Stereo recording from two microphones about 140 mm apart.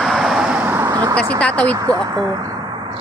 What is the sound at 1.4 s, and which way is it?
Speech, 10° left (ahead or behind).